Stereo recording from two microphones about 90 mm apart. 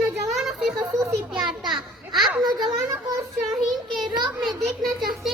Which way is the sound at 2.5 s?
50° right (ahead or behind).